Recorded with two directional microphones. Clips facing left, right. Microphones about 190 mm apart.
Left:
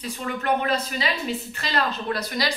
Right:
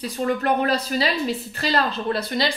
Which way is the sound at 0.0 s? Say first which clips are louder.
Right 6 dB; 35° right (ahead or behind).